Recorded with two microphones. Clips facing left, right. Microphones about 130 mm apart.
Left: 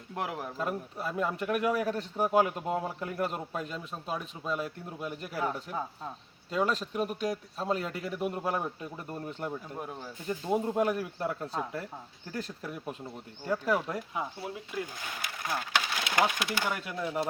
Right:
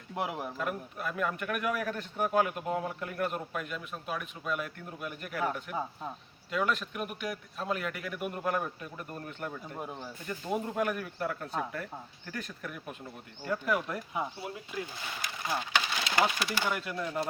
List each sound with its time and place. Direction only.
0.1 s speech: 5° right (ahead or behind)
0.5 s a man's voice: 30° left (ahead or behind)
5.7 s speech: 5° right (ahead or behind)
6.5 s a man's voice: 35° left (ahead or behind)
9.7 s speech: centre (ahead or behind)
10.2 s a man's voice: 25° left (ahead or behind)
14.1 s speech: centre (ahead or behind)
15.4 s wood: centre (ahead or behind)
16.1 s speech: centre (ahead or behind)